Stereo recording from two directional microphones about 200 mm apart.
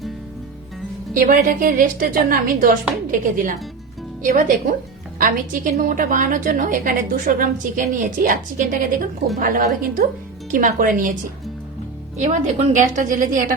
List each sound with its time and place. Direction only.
1.2 s a woman's voice: 45° right (ahead or behind)
12.1 s a woman's voice: 35° right (ahead or behind)